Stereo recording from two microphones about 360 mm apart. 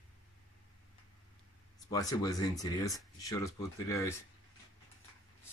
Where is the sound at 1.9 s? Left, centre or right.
Centre.